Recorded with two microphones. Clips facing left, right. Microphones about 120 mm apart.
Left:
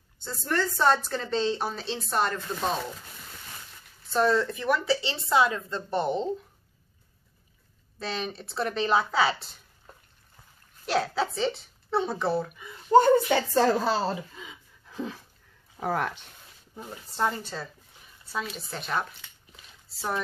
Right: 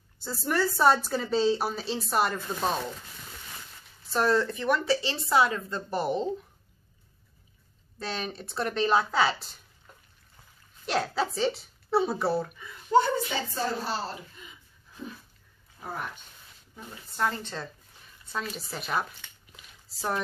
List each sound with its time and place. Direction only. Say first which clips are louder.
0.2 s a woman's voice: right 1 dB; 10° right (ahead or behind)
4.1 s a woman's voice: left 1 dB; centre (ahead or behind)
8.0 s a woman's voice: left 1 dB; centre (ahead or behind)
10.9 s a woman's voice: left 1 dB; centre (ahead or behind)
12.9 s speech: left 5 dB; 55° left (ahead or behind); by 13.7 s 85° left
14.3 s a sound: left 5 dB; 90° left
15.8 s speech: left 8 dB; 80° left
16.7 s speech: left 3 dB; 30° left (ahead or behind)
17.3 s a woman's voice: left 1 dB; 5° left (ahead or behind)